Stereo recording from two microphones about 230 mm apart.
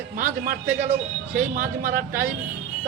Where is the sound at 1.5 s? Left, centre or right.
Right.